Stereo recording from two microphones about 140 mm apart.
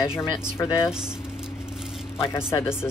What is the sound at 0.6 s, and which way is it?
Speech, 20° left (ahead or behind).